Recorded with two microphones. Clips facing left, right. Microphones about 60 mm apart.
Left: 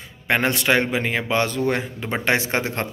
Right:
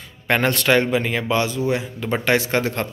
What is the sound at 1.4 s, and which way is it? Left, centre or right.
Speech, left.